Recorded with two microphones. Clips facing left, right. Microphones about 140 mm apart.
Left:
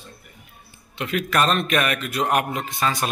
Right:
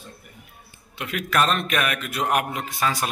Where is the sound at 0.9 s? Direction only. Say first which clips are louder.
Left 1 dB; 5° right (ahead or behind).